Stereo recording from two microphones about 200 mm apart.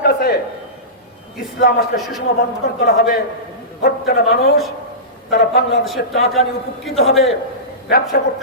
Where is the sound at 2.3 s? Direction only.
50° left (ahead or behind).